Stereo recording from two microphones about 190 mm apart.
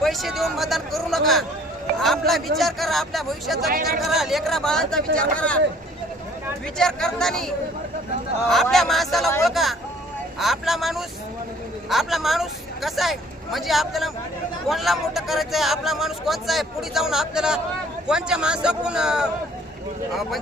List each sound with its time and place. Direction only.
0.0 s speech: centre (ahead or behind)
3.7 s speech: 50° right (ahead or behind)
4.0 s speech: centre (ahead or behind)
6.7 s speech: 5° left (ahead or behind)